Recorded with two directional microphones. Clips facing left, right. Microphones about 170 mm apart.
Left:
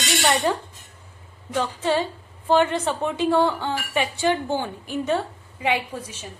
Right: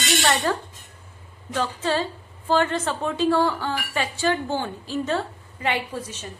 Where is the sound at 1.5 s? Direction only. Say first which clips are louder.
Left 2 dB; 15° left (ahead or behind).